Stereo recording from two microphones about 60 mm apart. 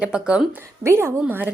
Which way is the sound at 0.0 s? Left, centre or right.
Centre.